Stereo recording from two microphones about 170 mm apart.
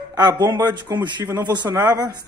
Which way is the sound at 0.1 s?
25° right (ahead or behind).